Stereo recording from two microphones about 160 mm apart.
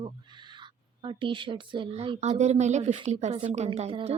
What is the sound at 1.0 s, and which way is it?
A woman's voice, 30° right (ahead or behind).